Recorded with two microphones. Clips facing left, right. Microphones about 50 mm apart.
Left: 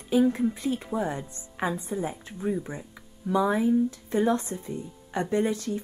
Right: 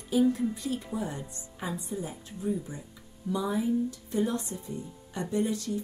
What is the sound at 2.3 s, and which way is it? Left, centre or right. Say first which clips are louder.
Speech: even; left.